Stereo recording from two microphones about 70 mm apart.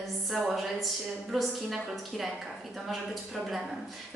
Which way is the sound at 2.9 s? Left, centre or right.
Centre.